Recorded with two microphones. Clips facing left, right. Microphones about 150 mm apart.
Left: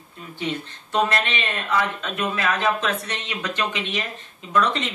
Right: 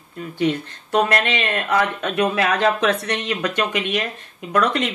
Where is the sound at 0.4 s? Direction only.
60° right (ahead or behind).